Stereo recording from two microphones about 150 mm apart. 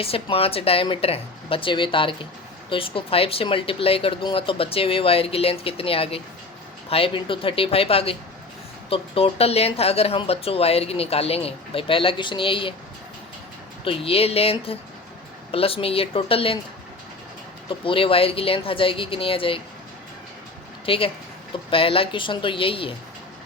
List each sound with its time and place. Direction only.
0.0 s speech: 40° left (ahead or behind)
13.8 s speech: 40° left (ahead or behind)
17.7 s speech: 35° left (ahead or behind)
20.8 s speech: 40° left (ahead or behind)